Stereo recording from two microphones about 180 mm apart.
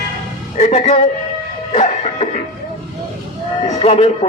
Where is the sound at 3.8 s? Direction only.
35° left (ahead or behind).